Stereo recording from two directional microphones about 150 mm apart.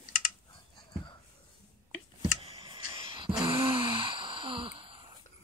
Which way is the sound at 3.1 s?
35° right (ahead or behind).